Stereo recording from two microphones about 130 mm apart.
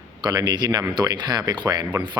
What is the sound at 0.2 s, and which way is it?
Speech, 30° right (ahead or behind).